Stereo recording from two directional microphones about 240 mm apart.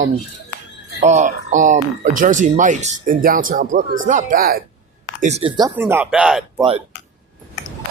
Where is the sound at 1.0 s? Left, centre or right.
Right.